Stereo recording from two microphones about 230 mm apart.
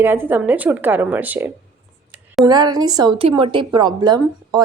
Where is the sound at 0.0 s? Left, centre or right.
Centre.